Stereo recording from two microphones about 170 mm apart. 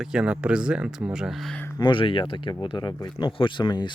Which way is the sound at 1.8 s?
25° left (ahead or behind).